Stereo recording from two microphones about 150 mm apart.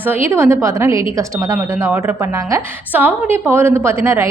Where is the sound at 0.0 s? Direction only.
15° right (ahead or behind).